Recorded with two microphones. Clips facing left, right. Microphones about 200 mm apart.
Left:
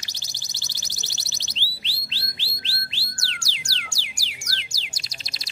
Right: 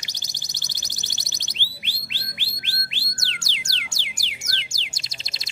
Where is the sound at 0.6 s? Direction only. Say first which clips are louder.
Even; 15° right (ahead or behind).